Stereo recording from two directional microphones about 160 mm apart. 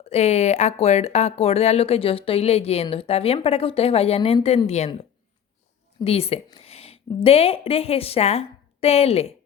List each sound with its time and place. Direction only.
0.0 s speech: 40° left (ahead or behind)
6.1 s a woman's voice: 40° left (ahead or behind)